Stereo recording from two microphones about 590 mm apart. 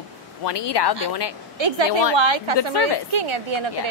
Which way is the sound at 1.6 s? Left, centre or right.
Right.